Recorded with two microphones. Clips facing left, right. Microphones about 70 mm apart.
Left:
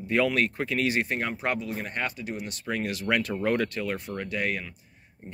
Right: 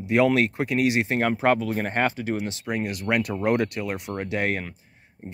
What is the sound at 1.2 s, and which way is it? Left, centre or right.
Speech, right.